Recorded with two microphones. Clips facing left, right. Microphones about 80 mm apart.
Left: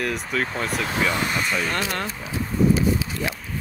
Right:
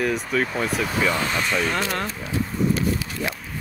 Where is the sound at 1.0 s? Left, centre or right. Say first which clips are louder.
Even; centre.